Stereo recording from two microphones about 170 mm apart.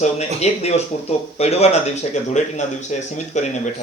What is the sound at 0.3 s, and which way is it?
Speech, 40° left (ahead or behind).